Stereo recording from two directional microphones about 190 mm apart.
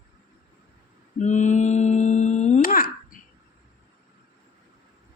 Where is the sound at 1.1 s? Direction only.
40° left (ahead or behind).